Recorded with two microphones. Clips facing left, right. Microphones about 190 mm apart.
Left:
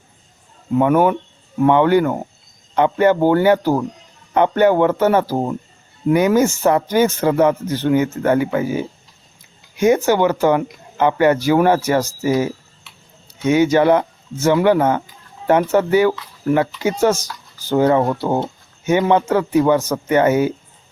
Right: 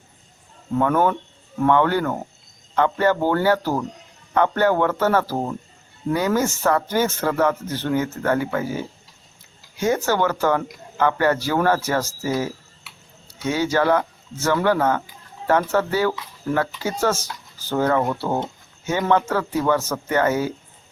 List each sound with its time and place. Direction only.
0.7 s speech: 15° left (ahead or behind)